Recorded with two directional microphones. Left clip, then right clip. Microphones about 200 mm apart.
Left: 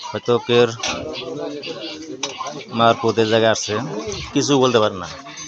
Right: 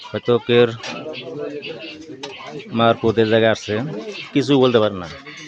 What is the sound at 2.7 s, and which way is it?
Speech, 30° right (ahead or behind).